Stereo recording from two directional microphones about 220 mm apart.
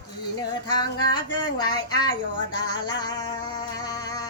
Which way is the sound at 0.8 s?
20° left (ahead or behind).